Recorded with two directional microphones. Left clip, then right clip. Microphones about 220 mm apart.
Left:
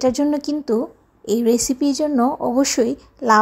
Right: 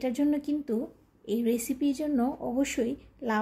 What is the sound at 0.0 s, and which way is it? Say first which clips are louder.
A woman's voice: left 10 dB; 20° left (ahead or behind).